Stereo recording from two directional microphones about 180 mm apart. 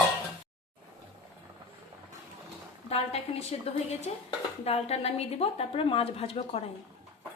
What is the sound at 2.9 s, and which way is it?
A woman's voice, 35° left (ahead or behind).